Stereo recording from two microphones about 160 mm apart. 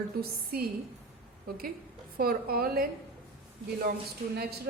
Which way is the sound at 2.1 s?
70° right (ahead or behind).